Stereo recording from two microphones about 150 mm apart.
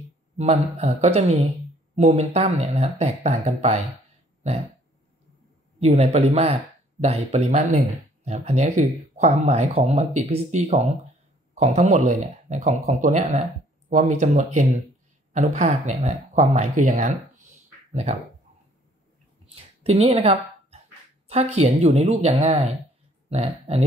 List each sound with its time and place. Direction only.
0.7 s speech: 45° right (ahead or behind)
4.4 s burping: 45° right (ahead or behind)
5.8 s speech: 45° right (ahead or behind)
19.5 s a sound: 45° right (ahead or behind)
21.3 s speech: 45° right (ahead or behind)